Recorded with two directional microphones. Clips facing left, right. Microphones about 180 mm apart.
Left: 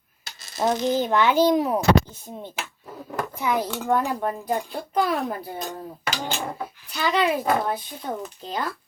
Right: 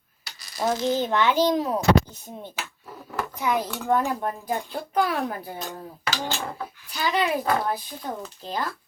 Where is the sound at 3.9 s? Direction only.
Centre (ahead or behind).